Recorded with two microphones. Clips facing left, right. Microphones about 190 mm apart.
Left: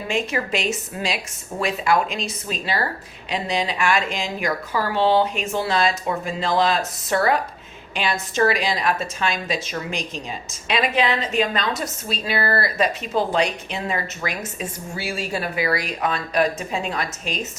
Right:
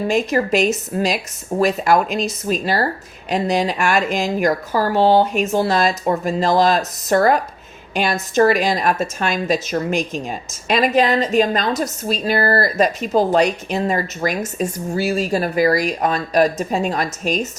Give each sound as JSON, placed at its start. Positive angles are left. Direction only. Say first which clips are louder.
{"t": 0.1, "sound": "a woman's voice", "louder": "right 5 dB", "side_deg": -40}